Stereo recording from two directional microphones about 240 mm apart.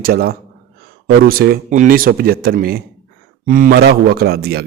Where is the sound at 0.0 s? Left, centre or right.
Right.